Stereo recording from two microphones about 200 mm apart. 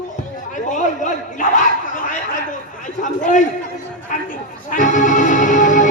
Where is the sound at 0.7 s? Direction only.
40° left (ahead or behind).